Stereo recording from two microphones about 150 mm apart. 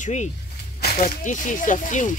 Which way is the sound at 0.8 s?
90° left.